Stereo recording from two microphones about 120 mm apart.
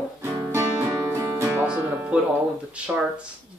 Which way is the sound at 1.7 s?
10° right (ahead or behind).